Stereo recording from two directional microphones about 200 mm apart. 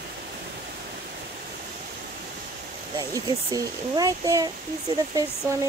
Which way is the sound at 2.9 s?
20° right (ahead or behind).